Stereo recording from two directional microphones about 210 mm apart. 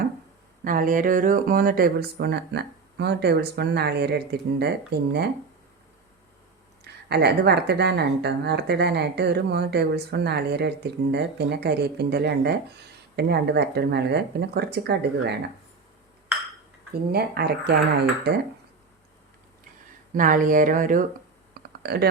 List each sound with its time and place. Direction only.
0.6 s a woman's voice: 40° right (ahead or behind)
6.8 s a woman's voice: 50° right (ahead or behind)
16.9 s a woman's voice: 50° right (ahead or behind)
20.1 s speech: 40° right (ahead or behind)
21.5 s a sound: 50° right (ahead or behind)